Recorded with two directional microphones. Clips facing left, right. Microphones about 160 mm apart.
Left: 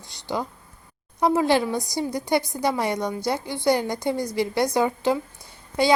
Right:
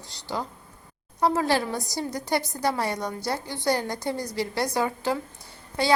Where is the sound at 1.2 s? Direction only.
15° left (ahead or behind).